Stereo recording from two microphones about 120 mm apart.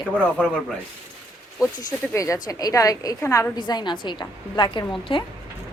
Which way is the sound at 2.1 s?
25° left (ahead or behind).